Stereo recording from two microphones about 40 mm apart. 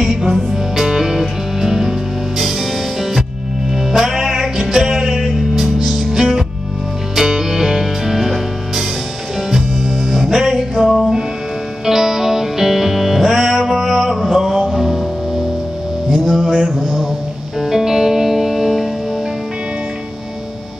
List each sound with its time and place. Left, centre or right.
0.0 s music: centre
3.9 s music: centre
10.0 s music: centre
16.2 s mantra: centre
16.7 s a sound: centre
17.6 s music: centre